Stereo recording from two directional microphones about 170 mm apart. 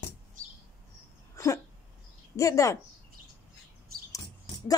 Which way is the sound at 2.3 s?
20° left (ahead or behind).